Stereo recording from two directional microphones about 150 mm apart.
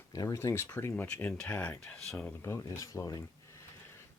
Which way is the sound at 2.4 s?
20° left (ahead or behind).